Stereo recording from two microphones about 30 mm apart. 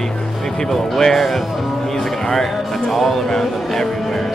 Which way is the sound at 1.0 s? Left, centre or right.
Centre.